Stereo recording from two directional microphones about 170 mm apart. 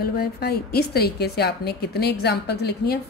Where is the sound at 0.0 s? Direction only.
65° left (ahead or behind).